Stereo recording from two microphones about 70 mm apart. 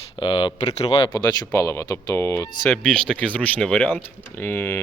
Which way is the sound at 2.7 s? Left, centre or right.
Centre.